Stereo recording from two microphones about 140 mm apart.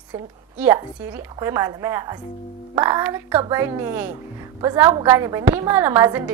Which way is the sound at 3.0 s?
15° right (ahead or behind).